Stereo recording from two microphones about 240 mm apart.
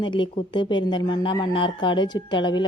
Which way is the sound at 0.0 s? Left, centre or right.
Centre.